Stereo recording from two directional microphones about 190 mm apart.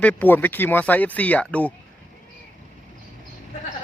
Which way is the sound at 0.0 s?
10° left (ahead or behind).